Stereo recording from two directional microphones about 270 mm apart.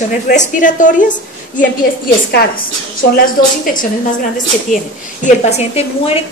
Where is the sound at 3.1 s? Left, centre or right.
Left.